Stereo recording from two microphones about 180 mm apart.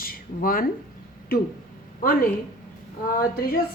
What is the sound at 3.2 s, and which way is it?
Speech, 55° left (ahead or behind).